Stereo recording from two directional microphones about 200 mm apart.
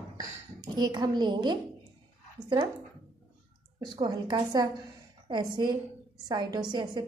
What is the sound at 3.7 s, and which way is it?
A woman's voice, 25° right (ahead or behind).